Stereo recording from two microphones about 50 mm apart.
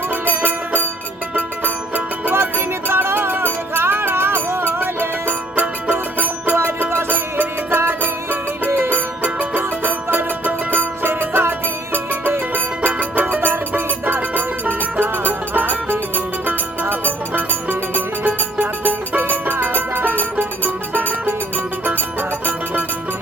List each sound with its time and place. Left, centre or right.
0.1 s music: right
2.3 s music: right
6.7 s music: right